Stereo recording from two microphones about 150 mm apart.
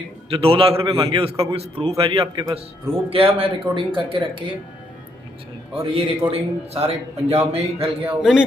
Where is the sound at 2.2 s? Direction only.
25° right (ahead or behind).